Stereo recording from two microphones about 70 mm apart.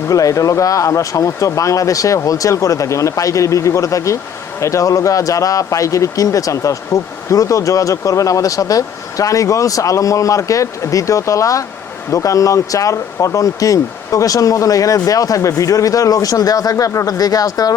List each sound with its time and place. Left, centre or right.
0.1 s speech: left